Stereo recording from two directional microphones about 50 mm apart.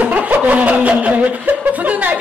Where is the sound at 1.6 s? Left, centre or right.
Right.